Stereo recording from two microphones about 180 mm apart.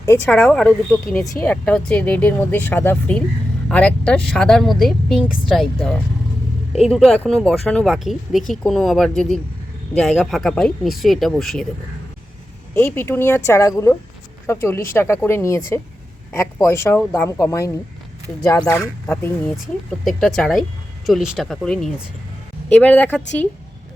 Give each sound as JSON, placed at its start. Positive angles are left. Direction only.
{"t": 0.3, "sound": "speech", "side_deg": 5}
{"t": 12.7, "sound": "speech", "side_deg": 15}
{"t": 20.1, "sound": "speech", "side_deg": 0}